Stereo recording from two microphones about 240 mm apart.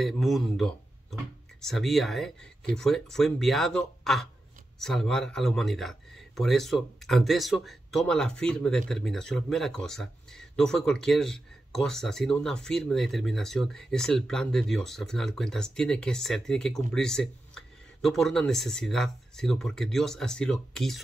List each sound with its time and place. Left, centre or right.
0.0 s speech: centre